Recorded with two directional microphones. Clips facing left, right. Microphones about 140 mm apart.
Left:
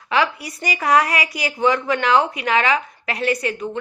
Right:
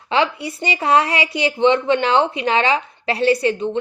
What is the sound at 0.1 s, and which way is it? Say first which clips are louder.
A woman's voice: right 2 dB; 25° right (ahead or behind).